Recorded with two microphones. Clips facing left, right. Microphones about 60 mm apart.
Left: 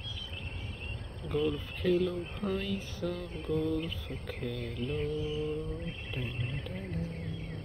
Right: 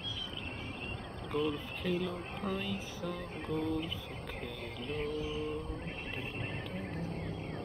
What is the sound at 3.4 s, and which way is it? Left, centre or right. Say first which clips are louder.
Music: left 3 dB; centre.